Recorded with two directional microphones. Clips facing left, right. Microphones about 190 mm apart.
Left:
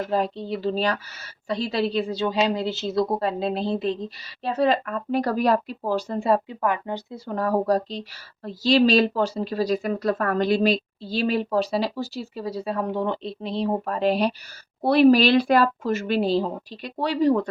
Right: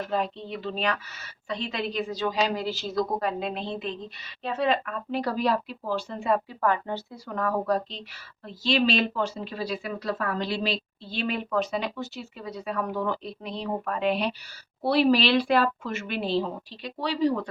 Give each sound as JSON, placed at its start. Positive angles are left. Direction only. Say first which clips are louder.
{"t": 0.1, "sound": "a woman's voice", "louder": "left 5 dB", "side_deg": 40}
{"t": 6.5, "sound": "speech", "louder": "left 1 dB", "side_deg": 15}
{"t": 7.3, "sound": "a woman's voice", "louder": "left 4 dB", "side_deg": 35}